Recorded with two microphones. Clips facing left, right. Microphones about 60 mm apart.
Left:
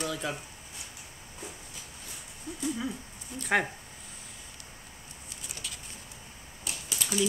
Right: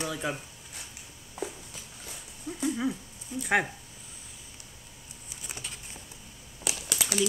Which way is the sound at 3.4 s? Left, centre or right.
Centre.